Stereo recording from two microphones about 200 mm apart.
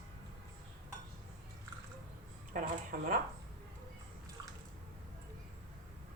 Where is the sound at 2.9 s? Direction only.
45° right (ahead or behind).